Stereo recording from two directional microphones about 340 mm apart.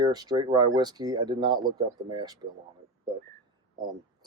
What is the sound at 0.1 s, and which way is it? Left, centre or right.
Speech, centre.